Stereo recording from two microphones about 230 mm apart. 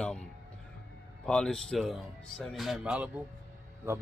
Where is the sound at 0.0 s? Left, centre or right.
Centre.